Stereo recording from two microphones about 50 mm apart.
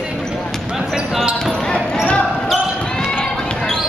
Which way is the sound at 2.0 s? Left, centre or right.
Left.